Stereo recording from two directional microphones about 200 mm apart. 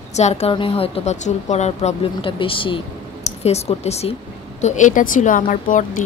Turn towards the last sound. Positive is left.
turn(degrees=40)  # may be behind; listen again after turning